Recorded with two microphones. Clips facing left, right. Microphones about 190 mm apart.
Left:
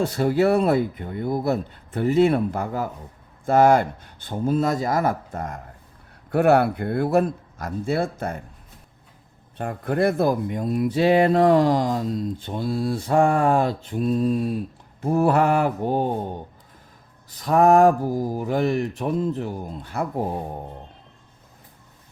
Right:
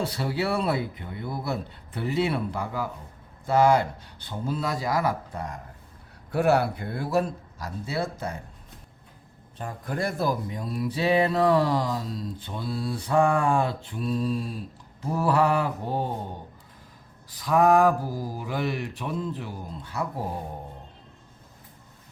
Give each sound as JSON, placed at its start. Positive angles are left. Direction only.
{"t": 0.0, "sound": "mantra", "side_deg": 50}
{"t": 6.3, "sound": "speech", "side_deg": 55}
{"t": 9.6, "sound": "speech", "side_deg": 60}
{"t": 11.3, "sound": "mantra", "side_deg": 50}
{"t": 17.3, "sound": "mantra", "side_deg": 45}